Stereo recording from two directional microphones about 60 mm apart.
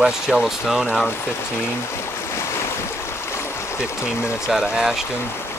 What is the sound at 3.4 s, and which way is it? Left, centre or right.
Stream, left.